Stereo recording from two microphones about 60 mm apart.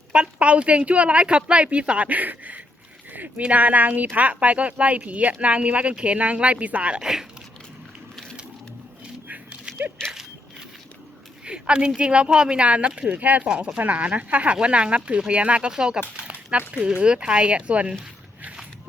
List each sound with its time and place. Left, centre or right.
0.1 s speech: right
3.1 s a sound: right
3.4 s speech: right
7.0 s speech: centre
9.2 s dog: right
10.0 s a sound: centre
11.4 s speech: centre
13.4 s speech: centre